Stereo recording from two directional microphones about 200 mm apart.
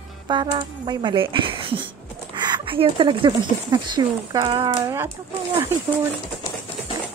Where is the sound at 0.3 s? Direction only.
20° right (ahead or behind).